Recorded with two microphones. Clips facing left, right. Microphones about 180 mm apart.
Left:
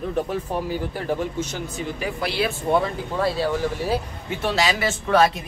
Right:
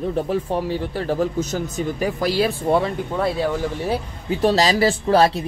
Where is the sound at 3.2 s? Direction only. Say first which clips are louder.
Right 1 dB; 20° right (ahead or behind).